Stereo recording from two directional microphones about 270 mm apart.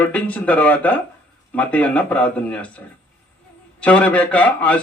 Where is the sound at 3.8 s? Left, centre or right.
Centre.